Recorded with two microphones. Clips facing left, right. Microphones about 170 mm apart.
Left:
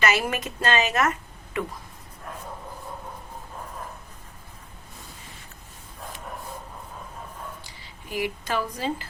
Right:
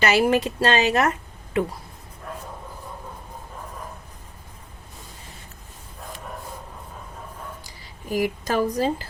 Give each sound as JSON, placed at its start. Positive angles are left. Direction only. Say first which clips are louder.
{"t": 0.0, "sound": "speech", "louder": "right 6 dB", "side_deg": -35}
{"t": 8.1, "sound": "speech", "louder": "right 5 dB", "side_deg": -40}